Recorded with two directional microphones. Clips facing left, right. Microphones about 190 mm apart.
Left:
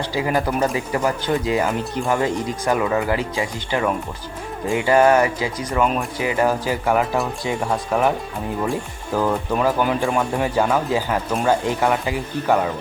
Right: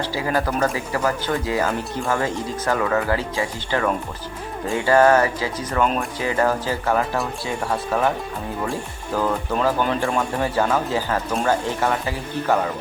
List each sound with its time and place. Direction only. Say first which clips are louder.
0.0 s speech: left 2 dB; 15° left (ahead or behind)
9.1 s speech: left 2 dB; 10° left (ahead or behind)